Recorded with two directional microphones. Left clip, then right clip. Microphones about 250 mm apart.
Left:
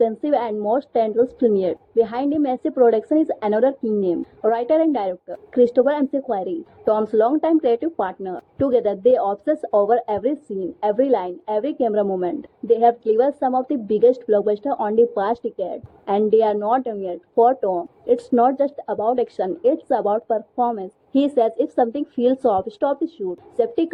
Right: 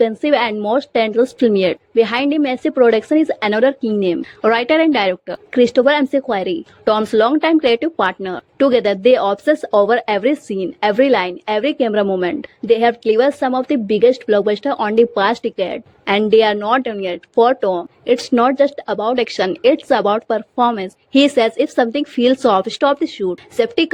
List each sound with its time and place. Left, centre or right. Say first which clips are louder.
0.0 s a woman's voice: right 5 dB; right
12.0 s a woman's voice: right 5 dB; right
12.3 s a woman's voice: right 4 dB; right
13.4 s a woman's voice: right 3 dB; right
13.7 s a woman's voice: right 4 dB; right
14.7 s a woman's voice: right 4 dB; right
15.4 s a woman's voice: right 6 dB; right
17.6 s a woman's voice: right 4 dB; right
18.0 s a woman's voice: right 3 dB; right
22.8 s a woman's voice: right 6 dB; right
23.6 s a woman's voice: right 4 dB; right